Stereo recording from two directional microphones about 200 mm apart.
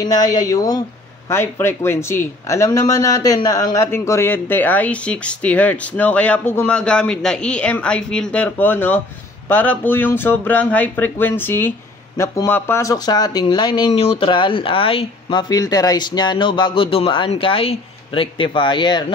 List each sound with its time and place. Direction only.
0.0 s speech: 20° left (ahead or behind)